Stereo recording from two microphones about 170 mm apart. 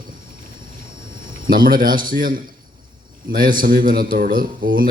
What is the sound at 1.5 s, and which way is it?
Speech, 55° right (ahead or behind).